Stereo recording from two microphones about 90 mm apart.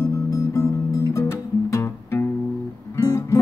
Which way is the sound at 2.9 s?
35° left (ahead or behind).